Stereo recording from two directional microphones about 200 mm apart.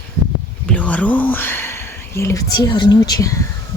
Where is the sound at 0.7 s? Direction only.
5° left (ahead or behind).